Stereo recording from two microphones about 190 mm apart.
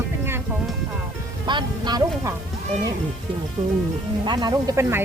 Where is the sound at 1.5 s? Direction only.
25° right (ahead or behind).